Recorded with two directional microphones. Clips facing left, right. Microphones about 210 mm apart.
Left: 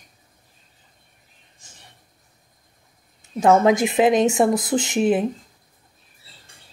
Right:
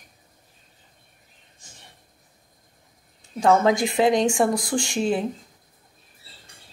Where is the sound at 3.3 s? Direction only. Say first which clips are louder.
Left 3 dB; 20° left (ahead or behind).